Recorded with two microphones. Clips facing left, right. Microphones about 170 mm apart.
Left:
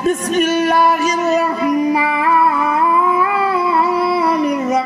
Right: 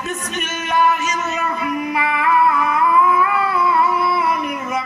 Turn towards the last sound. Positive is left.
turn(degrees=35)  # may be behind; listen again after turning